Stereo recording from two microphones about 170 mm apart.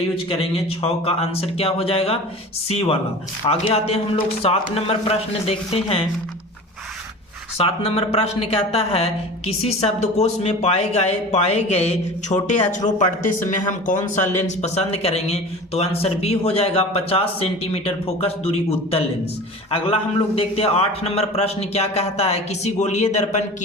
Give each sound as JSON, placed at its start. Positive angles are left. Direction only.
{"t": 0.8, "sound": "a man's voice", "side_deg": 35}
{"t": 7.6, "sound": "a man's voice", "side_deg": 35}
{"t": 12.7, "sound": "a man's voice", "side_deg": 45}